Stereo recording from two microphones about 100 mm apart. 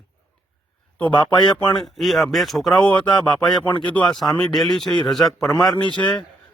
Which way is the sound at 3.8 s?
10° left (ahead or behind).